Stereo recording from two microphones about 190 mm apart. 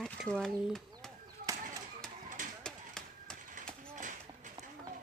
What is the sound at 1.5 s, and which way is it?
Chop, 15° right (ahead or behind).